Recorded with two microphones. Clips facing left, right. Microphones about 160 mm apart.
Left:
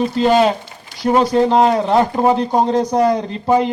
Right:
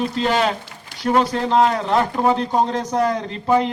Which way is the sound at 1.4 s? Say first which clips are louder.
Left 4 dB; 35° left (ahead or behind).